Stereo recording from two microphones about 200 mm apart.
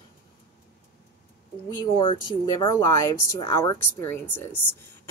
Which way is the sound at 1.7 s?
25° left (ahead or behind).